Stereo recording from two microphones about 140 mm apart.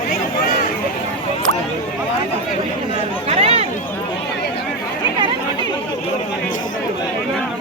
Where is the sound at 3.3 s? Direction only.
45° right (ahead or behind).